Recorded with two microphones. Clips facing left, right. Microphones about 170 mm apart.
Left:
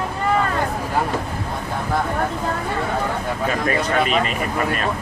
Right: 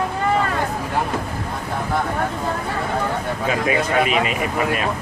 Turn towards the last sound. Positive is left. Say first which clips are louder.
# right 1 dB
turn(degrees=-5)  # may be behind; listen again after turning